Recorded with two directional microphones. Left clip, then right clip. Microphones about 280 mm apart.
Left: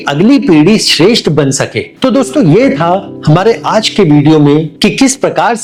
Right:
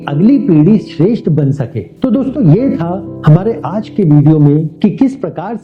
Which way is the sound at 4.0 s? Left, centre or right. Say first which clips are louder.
Left 1 dB; left.